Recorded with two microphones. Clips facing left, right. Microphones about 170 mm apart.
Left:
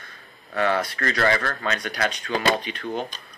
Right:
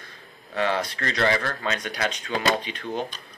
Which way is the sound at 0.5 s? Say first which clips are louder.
Left 2 dB; 20° right (ahead or behind).